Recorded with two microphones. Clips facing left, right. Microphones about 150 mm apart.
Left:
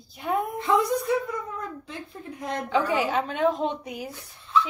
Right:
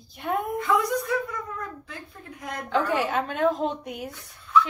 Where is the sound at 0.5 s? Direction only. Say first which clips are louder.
Left 1 dB; 25° left (ahead or behind).